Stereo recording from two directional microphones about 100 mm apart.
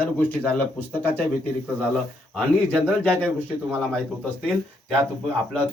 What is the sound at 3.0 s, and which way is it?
Speech, 15° left (ahead or behind).